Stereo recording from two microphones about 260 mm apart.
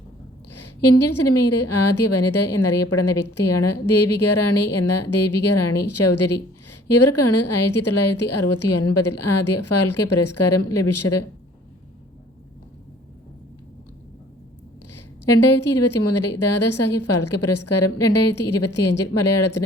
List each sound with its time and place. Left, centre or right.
0.5 s a woman's voice: left
14.9 s a woman's voice: left